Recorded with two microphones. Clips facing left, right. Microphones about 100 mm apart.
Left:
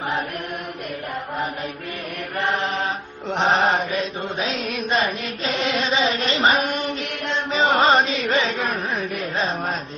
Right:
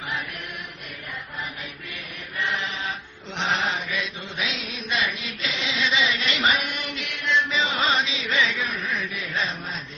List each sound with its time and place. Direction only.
2.3 s chant: 45° left (ahead or behind)
3.3 s mantra: 45° left (ahead or behind)